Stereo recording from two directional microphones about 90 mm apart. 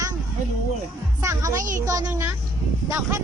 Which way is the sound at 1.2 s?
35° right (ahead or behind).